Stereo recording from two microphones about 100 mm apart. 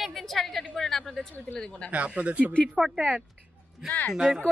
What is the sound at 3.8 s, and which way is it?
Speech, 15° left (ahead or behind).